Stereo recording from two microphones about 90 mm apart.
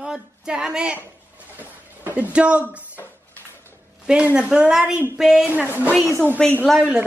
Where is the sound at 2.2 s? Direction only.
15° right (ahead or behind).